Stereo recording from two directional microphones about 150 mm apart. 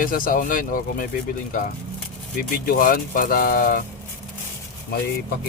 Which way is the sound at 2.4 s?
70° left (ahead or behind).